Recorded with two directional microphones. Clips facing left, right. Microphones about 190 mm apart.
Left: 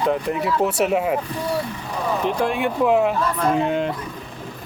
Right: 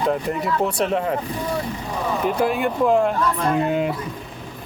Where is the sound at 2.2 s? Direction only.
5° right (ahead or behind).